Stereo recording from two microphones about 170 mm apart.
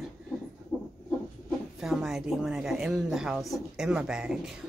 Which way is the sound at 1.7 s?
Centre (ahead or behind).